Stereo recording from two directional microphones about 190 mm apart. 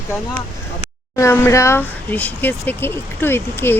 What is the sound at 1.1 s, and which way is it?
Speech, 15° left (ahead or behind).